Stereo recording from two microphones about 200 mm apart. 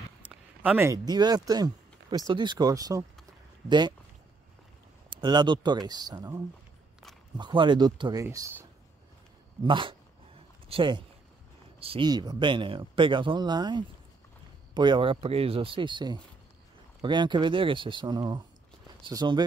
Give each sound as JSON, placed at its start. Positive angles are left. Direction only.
{"t": 0.3, "sound": "speech", "side_deg": -5}
{"t": 5.2, "sound": "speech", "side_deg": -20}
{"t": 9.6, "sound": "speech", "side_deg": -25}